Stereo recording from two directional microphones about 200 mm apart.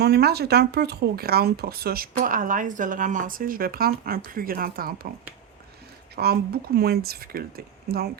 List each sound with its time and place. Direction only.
0.0 s speech: 55° right (ahead or behind)
6.1 s speech: 50° right (ahead or behind)